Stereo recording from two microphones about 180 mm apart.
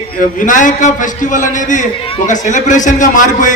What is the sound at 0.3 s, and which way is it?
A man's voice, 45° left (ahead or behind).